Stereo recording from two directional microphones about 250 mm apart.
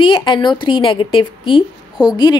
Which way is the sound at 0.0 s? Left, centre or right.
Centre.